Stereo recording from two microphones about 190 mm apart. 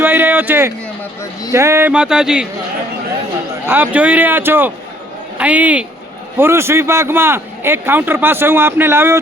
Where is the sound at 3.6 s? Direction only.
10° right (ahead or behind).